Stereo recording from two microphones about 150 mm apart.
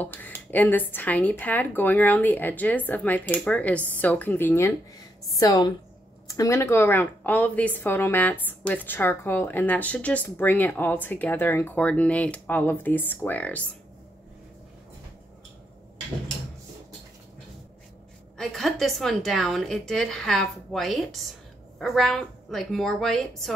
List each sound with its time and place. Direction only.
0.0 s a woman's voice: 10° left (ahead or behind)
18.4 s a woman's voice: centre (ahead or behind)